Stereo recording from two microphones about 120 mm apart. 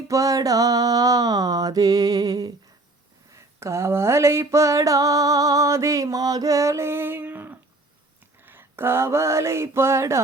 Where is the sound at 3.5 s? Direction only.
25° right (ahead or behind).